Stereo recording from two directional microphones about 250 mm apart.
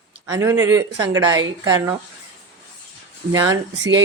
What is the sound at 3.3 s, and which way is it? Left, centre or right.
Speech, centre.